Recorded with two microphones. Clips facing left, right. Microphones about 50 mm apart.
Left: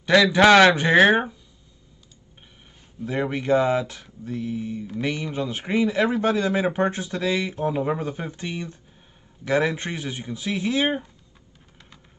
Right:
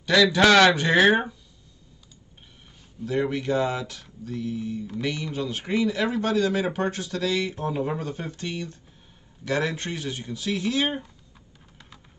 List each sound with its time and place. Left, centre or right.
0.0 s speech: left
3.1 s speech: left